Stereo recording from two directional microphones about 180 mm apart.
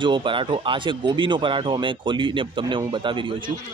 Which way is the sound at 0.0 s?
25° right (ahead or behind).